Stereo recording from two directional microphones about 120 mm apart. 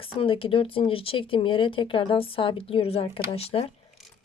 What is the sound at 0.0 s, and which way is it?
Speech, 50° left (ahead or behind).